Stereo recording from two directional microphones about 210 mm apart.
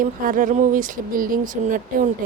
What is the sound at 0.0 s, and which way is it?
Speech, 40° right (ahead or behind).